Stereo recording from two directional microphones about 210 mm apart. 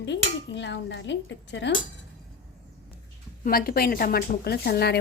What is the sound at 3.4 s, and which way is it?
A woman's voice, 45° left (ahead or behind).